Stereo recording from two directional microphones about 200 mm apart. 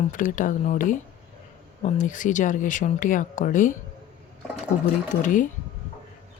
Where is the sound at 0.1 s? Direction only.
40° left (ahead or behind).